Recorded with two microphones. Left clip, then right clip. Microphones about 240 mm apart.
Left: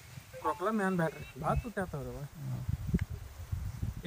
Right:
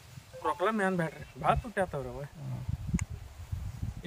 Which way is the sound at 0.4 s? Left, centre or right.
Right.